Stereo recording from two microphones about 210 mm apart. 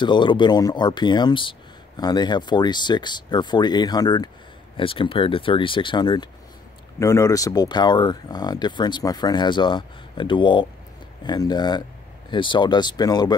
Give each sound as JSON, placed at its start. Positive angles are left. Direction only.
{"t": 0.0, "sound": "speech", "side_deg": 20}